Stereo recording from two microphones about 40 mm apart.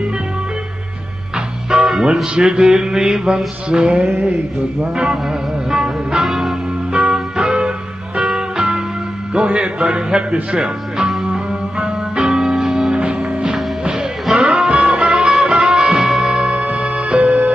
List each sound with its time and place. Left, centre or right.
1.7 s music: centre
2.3 s mantra: right
5.7 s music: centre